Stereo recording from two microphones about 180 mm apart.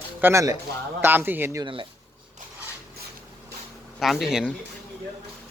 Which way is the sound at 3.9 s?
Centre (ahead or behind).